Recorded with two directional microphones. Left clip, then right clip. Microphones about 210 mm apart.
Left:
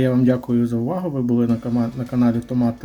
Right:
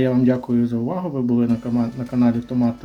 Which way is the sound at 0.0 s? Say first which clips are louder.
Even; 10° left (ahead or behind).